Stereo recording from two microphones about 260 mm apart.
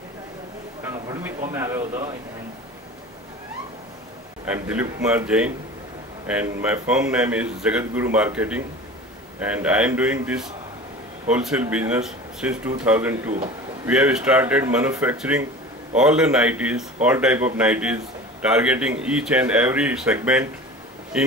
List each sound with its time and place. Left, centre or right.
0.8 s a sound: centre
1.5 s speech: centre
4.5 s speech: centre